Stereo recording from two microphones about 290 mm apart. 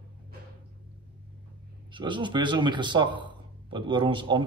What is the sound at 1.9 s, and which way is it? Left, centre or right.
A man's voice, centre.